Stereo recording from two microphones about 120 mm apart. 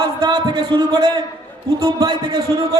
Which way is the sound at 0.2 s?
35° right (ahead or behind).